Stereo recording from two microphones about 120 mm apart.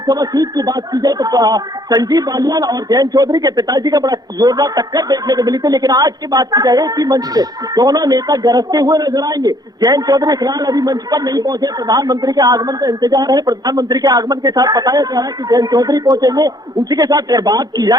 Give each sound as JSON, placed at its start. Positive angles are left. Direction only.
{"t": 0.0, "sound": "speech", "side_deg": -35}